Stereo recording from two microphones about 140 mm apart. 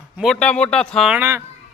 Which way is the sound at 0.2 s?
5° left (ahead or behind).